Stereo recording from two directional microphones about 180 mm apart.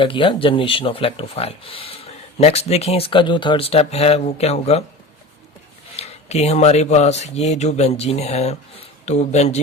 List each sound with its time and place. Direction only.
0.0 s speech: 30° left (ahead or behind)
6.0 s speech: 35° left (ahead or behind)